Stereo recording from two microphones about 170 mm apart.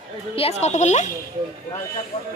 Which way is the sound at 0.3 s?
40° left (ahead or behind).